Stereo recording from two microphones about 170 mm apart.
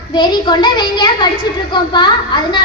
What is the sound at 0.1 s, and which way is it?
A child's voice, 25° left (ahead or behind).